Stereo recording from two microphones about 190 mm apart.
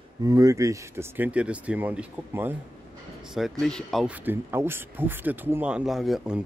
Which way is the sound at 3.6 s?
Centre (ahead or behind).